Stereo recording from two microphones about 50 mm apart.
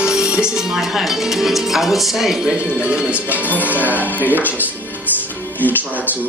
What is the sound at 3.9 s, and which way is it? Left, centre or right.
Speech, left.